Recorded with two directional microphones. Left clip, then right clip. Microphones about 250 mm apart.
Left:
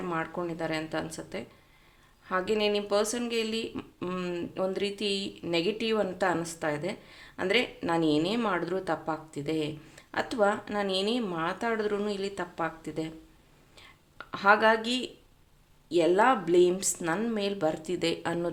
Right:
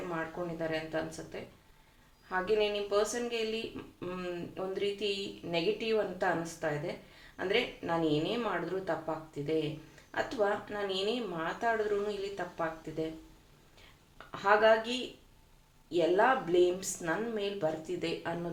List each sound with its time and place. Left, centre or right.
0.1 s speech: left
14.3 s speech: left